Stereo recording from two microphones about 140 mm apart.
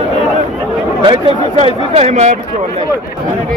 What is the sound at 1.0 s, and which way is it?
Speech, 35° right (ahead or behind).